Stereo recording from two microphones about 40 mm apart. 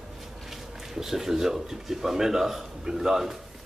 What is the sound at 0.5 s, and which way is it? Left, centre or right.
Speech, centre.